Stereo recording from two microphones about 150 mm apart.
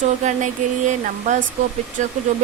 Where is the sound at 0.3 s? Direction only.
55° right (ahead or behind).